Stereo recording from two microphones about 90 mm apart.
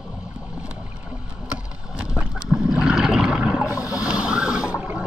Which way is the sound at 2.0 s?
15° right (ahead or behind).